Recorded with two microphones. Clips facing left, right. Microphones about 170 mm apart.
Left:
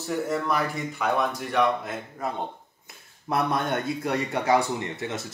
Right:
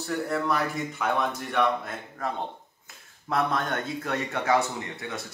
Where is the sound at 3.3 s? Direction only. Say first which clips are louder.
Left 2 dB; 15° left (ahead or behind).